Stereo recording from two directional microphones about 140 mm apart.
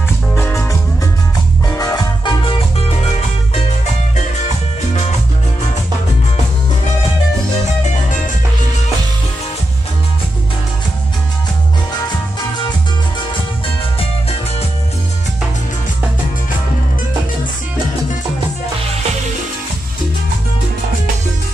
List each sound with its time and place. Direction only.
0.3 s music: 15° left (ahead or behind)